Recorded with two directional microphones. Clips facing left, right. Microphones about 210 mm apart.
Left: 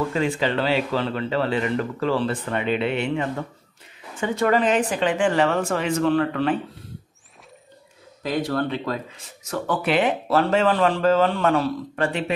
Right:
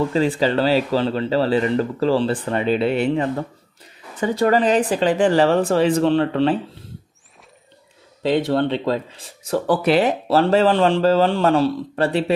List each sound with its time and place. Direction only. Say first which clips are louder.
0.1 s speech: right 4 dB; 35° right (ahead or behind)
8.2 s speech: right 6 dB; 25° right (ahead or behind)